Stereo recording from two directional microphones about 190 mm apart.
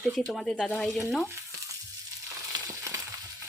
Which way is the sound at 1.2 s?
15° right (ahead or behind).